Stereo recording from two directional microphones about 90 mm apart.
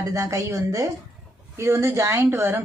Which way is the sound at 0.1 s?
35° right (ahead or behind).